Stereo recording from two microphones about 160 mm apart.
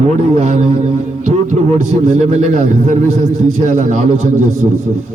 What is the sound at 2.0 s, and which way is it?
A man's voice, 45° right (ahead or behind).